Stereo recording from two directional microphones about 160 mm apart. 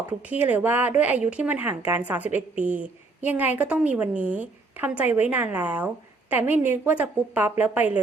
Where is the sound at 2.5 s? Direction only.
55° right (ahead or behind).